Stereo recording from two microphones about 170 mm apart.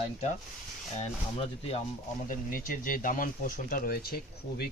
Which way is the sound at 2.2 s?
50° left (ahead or behind).